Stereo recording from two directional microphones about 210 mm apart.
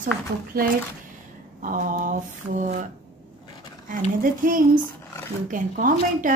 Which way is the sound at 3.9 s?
40° right (ahead or behind).